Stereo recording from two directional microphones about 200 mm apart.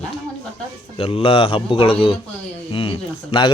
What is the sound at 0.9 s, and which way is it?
A man's voice, 30° left (ahead or behind).